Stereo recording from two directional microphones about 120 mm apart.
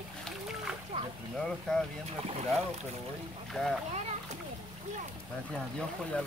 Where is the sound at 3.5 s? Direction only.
Centre (ahead or behind).